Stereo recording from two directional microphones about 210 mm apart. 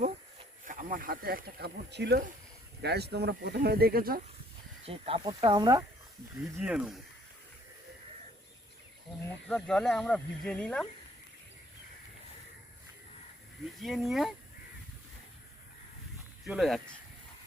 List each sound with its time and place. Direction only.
0.6 s speech: 40° right (ahead or behind)
4.9 s speech: 25° right (ahead or behind)
6.6 s speech: 5° right (ahead or behind)
9.5 s speech: 5° left (ahead or behind)
13.7 s speech: centre (ahead or behind)
16.5 s speech: centre (ahead or behind)